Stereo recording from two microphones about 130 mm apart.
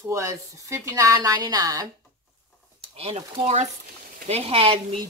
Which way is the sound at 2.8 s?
50° right (ahead or behind).